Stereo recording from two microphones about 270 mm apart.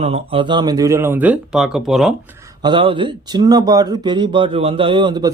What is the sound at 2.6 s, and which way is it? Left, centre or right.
Speech, centre.